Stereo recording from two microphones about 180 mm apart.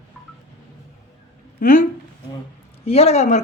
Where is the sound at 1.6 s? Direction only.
45° left (ahead or behind).